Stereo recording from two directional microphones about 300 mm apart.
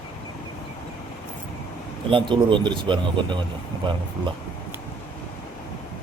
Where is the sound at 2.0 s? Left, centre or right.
Centre.